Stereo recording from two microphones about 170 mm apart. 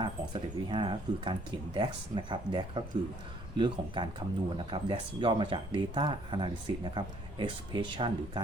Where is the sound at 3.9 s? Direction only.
25° right (ahead or behind).